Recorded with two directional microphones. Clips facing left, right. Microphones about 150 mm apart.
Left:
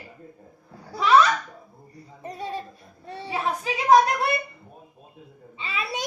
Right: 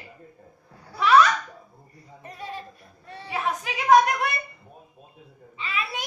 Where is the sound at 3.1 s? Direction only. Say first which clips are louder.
Left 1 dB; 30° left (ahead or behind).